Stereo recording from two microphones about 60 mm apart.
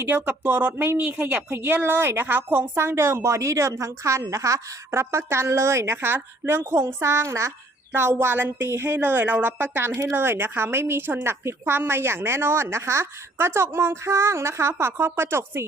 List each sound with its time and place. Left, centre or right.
0.0 s a woman's voice: right
1.5 s a woman's voice: right
7.9 s a woman's voice: right